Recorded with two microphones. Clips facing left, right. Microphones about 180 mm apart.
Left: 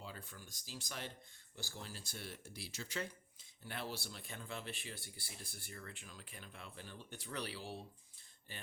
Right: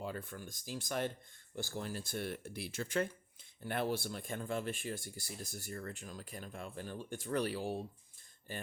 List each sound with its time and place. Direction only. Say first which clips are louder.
0.0 s speech: right 9 dB; 55° right (ahead or behind)